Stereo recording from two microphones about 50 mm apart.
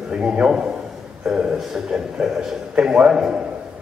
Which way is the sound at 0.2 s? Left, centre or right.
Centre.